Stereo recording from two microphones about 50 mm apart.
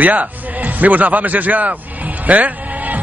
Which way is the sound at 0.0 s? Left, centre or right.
Right.